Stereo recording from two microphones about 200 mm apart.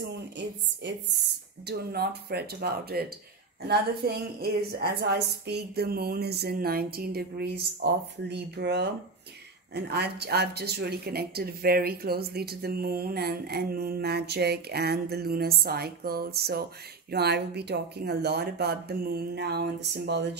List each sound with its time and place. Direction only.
1.7 s speech: 55° right (ahead or behind)